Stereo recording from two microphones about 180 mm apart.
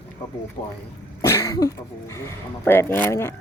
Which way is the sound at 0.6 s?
40° left (ahead or behind).